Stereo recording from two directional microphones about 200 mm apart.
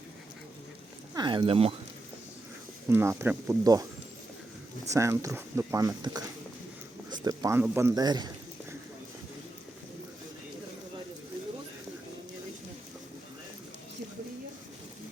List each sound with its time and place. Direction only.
1.1 s speech: 20° right (ahead or behind)
2.9 s speech: 10° right (ahead or behind)
4.9 s speech: 15° right (ahead or behind)